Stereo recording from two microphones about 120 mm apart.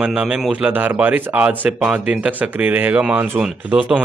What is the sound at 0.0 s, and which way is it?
Speech, 5° right (ahead or behind).